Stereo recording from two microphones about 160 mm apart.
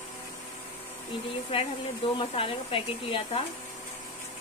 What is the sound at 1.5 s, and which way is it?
Speech, 35° left (ahead or behind).